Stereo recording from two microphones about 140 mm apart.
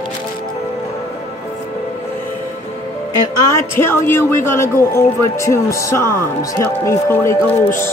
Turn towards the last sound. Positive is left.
turn(degrees=15)  # may be behind; listen again after turning